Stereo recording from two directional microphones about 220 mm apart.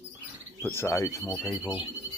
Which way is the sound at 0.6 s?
10° left (ahead or behind).